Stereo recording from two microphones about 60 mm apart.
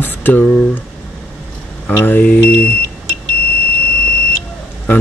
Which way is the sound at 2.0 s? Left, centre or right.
Left.